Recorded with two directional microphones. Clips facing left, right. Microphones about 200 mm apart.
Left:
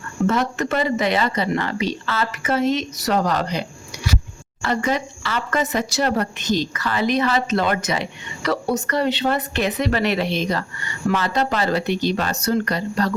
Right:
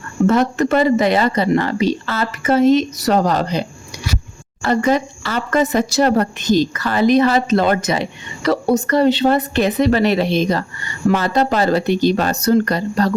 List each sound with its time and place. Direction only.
0.3 s speech: 40° right (ahead or behind)
4.6 s speech: 40° right (ahead or behind)